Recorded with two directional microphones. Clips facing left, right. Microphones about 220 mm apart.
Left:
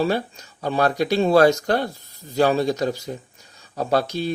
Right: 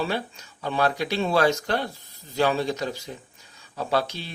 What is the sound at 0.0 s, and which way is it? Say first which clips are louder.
Speech: left 6 dB; 40° left (ahead or behind).